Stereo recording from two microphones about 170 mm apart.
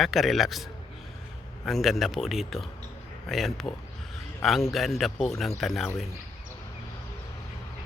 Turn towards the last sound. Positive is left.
turn(degrees=0)  # may be behind; listen again after turning